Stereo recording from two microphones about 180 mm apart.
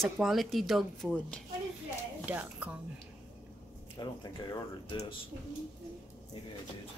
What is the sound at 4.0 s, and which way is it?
Speech, 25° left (ahead or behind).